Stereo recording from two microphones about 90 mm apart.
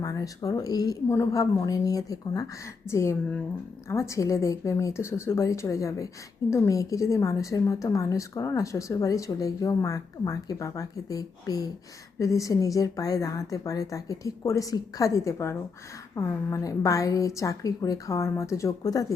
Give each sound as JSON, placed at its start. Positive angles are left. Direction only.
{"t": 0.0, "sound": "a woman's voice", "side_deg": 40}
{"t": 1.0, "sound": "a woman's voice", "side_deg": 30}
{"t": 2.9, "sound": "a woman's voice", "side_deg": 30}